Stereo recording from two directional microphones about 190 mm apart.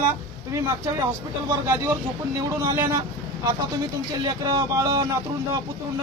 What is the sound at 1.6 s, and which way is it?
Speech, 15° right (ahead or behind).